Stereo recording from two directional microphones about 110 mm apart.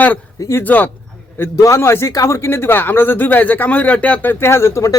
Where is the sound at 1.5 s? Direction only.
30° left (ahead or behind).